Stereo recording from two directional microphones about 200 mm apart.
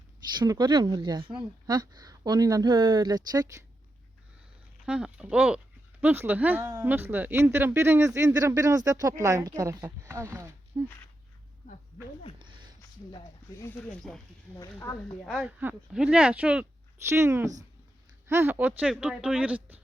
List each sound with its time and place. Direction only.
0.3 s speech: 20° right (ahead or behind)
4.9 s speech: 5° right (ahead or behind)
13.1 s speech: 25° left (ahead or behind)
13.7 s speech: 5° left (ahead or behind)
14.6 s speech: 15° left (ahead or behind)
15.2 s speech: centre (ahead or behind)